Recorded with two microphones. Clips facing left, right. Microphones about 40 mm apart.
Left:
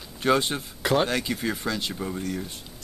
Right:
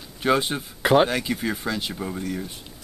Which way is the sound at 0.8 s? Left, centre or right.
Right.